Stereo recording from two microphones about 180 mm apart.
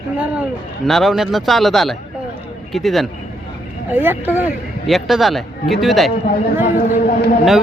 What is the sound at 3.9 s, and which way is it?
Speech, 10° right (ahead or behind).